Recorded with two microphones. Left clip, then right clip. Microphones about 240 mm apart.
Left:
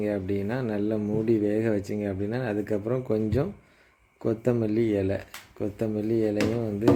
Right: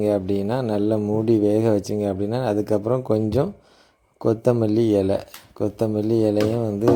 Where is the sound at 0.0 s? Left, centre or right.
Right.